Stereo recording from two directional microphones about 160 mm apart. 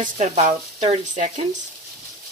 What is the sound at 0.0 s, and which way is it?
Speech, 50° right (ahead or behind).